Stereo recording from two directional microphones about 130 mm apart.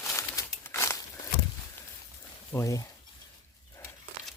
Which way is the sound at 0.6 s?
20° left (ahead or behind).